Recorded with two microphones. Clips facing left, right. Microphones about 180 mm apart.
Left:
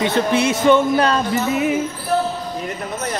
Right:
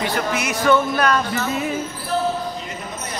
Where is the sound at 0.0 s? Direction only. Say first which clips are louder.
Left 6 dB; 25° left (ahead or behind).